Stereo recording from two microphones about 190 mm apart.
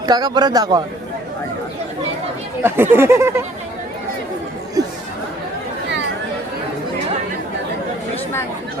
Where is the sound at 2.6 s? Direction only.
10° right (ahead or behind).